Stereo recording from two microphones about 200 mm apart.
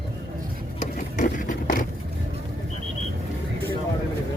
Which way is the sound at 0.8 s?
40° left (ahead or behind).